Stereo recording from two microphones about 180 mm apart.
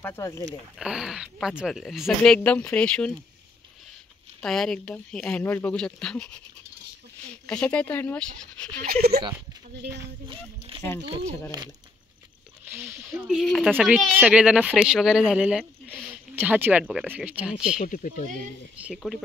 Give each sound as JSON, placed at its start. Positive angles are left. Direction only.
{"t": 0.0, "sound": "speech", "side_deg": 15}
{"t": 0.7, "sound": "speech", "side_deg": -5}
{"t": 4.4, "sound": "speech", "side_deg": 5}
{"t": 7.4, "sound": "speech", "side_deg": 5}
{"t": 8.8, "sound": "speech", "side_deg": -60}
{"t": 10.3, "sound": "a sound", "side_deg": -30}
{"t": 11.1, "sound": "speech", "side_deg": -30}
{"t": 12.6, "sound": "speech", "side_deg": -10}
{"t": 17.7, "sound": "speech", "side_deg": 45}
{"t": 18.8, "sound": "speech", "side_deg": -5}